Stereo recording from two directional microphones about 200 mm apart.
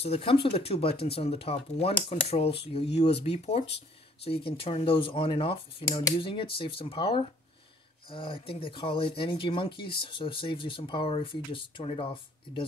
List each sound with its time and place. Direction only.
0.0 s speech: 30° left (ahead or behind)